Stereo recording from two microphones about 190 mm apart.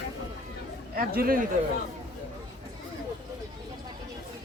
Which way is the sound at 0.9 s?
50° right (ahead or behind).